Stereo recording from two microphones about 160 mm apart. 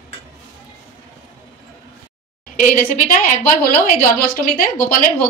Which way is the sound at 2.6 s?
55° left (ahead or behind).